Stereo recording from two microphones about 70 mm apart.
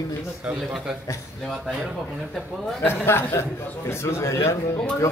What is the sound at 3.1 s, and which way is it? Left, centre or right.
A man's voice, left.